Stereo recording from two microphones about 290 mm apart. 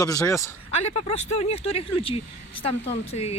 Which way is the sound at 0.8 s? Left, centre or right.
Left.